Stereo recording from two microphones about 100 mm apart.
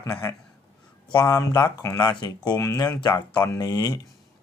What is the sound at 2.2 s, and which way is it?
Speech, 45° left (ahead or behind).